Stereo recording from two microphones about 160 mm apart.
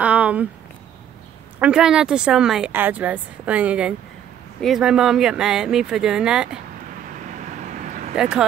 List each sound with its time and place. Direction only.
0.0 s a sound: 10° right (ahead or behind)
1.6 s speech: 5° right (ahead or behind)
8.2 s speech: 5° right (ahead or behind)